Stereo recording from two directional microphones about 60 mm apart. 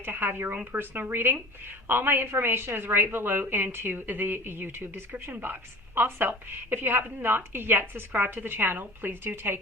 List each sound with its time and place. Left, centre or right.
0.0 s a woman's voice: right